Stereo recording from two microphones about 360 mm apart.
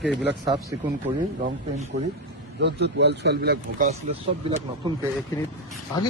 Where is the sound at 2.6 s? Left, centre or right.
Right.